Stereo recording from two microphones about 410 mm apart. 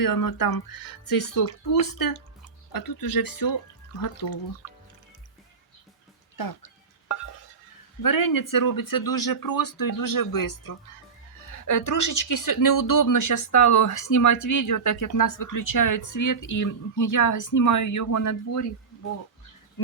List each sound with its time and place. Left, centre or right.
0.0 s speech: left
6.3 s speech: left
8.0 s speech: left